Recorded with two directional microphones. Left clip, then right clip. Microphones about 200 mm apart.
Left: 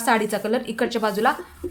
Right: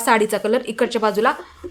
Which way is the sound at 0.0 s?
20° right (ahead or behind).